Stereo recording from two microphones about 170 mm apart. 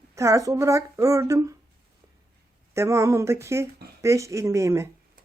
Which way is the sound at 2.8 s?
15° right (ahead or behind).